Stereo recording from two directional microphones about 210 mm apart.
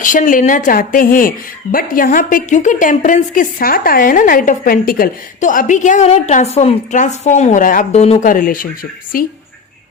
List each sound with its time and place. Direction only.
0.0 s a woman's voice: 40° left (ahead or behind)